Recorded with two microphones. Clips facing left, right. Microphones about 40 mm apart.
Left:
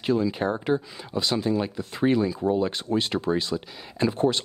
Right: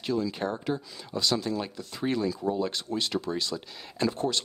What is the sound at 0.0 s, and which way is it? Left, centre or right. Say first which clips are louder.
Speech: left 5 dB; left.